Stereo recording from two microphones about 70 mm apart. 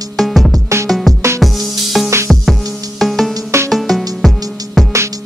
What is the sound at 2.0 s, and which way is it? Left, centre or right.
Music, centre.